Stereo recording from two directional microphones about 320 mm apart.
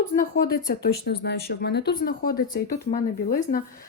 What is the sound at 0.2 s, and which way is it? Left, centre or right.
Speech, left.